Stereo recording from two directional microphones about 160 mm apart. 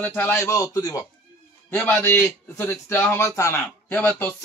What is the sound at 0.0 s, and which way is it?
Speech, 10° left (ahead or behind).